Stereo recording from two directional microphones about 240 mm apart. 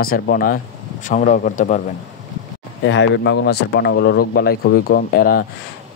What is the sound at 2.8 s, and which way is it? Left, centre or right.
Speech, left.